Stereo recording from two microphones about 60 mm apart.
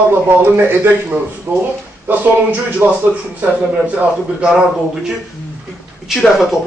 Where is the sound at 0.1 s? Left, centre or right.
Right.